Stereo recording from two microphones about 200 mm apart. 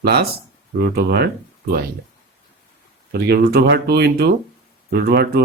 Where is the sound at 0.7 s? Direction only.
50° right (ahead or behind).